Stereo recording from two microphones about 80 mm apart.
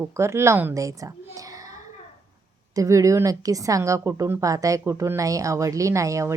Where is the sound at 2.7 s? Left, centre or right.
Right.